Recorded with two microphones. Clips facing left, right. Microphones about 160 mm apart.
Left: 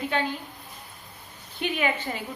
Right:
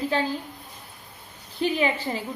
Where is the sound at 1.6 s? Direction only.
30° right (ahead or behind).